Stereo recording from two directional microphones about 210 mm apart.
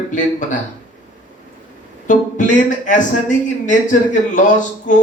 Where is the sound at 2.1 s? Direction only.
35° left (ahead or behind).